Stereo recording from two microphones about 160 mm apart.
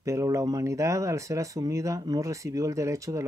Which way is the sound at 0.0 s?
20° right (ahead or behind).